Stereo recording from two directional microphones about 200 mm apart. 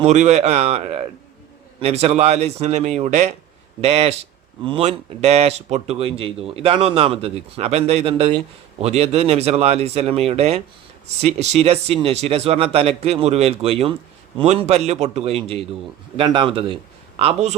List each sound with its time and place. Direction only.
0.0 s a man's voice: 35° right (ahead or behind)